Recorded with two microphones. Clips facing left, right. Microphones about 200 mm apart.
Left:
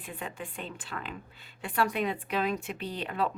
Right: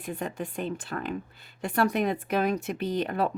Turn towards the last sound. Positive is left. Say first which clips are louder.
# right 6 dB
turn(degrees=-45)  # may be behind; listen again after turning